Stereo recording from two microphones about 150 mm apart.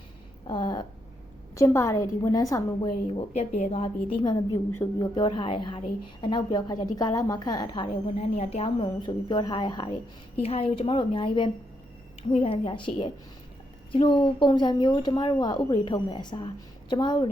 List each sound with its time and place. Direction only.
0.4 s a sound: 30° left (ahead or behind)
1.5 s a woman's voice: 20° left (ahead or behind)
3.2 s a woman's voice: 45° left (ahead or behind); by 7.9 s 30° left (ahead or behind)
8.0 s a woman's voice: 45° left (ahead or behind)